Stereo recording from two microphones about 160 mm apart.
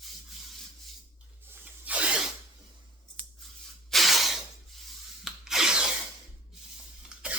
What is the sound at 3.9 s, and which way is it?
Spray, centre (ahead or behind).